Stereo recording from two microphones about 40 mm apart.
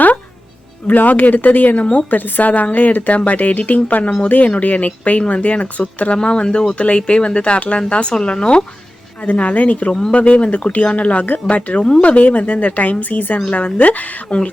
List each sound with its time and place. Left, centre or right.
0.9 s a woman's voice: left
6.1 s speech: left
9.2 s speech: left
9.9 s speech: centre
10.2 s speech: left
13.5 s speech: left